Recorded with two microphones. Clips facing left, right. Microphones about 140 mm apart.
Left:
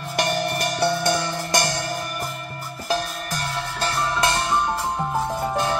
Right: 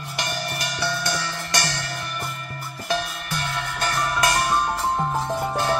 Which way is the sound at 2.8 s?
40° left (ahead or behind).